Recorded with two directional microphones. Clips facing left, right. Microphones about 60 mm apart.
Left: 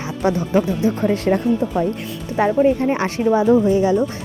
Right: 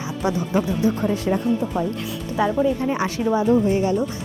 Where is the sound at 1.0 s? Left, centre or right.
Left.